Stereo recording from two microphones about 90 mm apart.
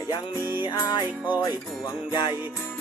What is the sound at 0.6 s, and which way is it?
Music, 55° left (ahead or behind).